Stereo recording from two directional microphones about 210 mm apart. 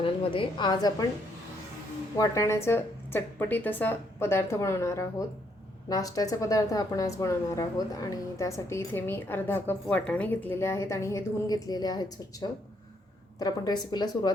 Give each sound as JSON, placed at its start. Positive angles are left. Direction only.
{"t": 0.0, "sound": "a woman's voice", "side_deg": 25}
{"t": 2.1, "sound": "a woman's voice", "side_deg": 15}